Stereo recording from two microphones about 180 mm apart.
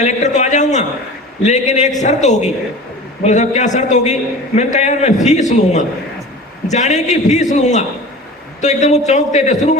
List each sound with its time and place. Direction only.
0.0 s a man's voice: 40° left (ahead or behind)